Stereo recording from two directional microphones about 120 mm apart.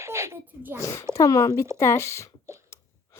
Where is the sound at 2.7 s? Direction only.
25° left (ahead or behind).